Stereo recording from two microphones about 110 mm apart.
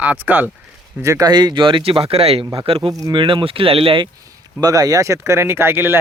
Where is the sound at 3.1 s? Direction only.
50° right (ahead or behind).